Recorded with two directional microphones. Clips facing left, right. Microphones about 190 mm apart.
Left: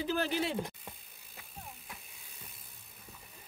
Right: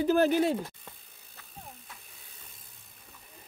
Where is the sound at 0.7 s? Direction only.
15° left (ahead or behind).